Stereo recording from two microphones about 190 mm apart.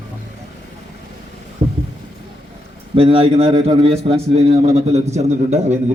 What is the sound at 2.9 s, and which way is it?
A man's voice, 30° right (ahead or behind).